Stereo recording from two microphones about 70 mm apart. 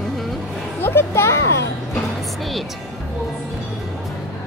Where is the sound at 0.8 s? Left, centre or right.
Left.